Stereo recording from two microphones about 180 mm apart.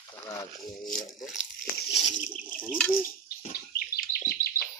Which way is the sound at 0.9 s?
50° left (ahead or behind).